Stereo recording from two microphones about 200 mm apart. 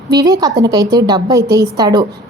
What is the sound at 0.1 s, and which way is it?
A woman's voice, 20° right (ahead or behind).